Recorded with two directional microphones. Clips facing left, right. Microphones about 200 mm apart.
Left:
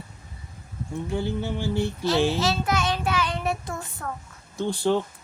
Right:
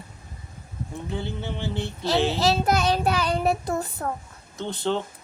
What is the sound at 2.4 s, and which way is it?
A child's voice, 35° right (ahead or behind).